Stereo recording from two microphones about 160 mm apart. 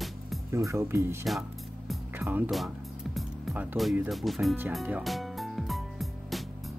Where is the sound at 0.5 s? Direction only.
15° right (ahead or behind).